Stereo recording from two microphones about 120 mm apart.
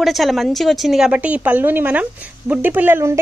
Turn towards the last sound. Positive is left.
turn(degrees=-20)  # may be behind; listen again after turning